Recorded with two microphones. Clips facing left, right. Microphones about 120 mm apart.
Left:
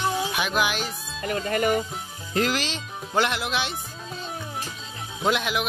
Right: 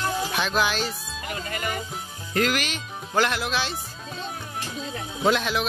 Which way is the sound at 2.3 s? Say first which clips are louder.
Even; 25° left (ahead or behind).